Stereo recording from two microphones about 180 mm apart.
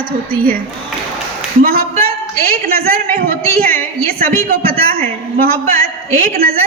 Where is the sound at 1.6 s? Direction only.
55° right (ahead or behind).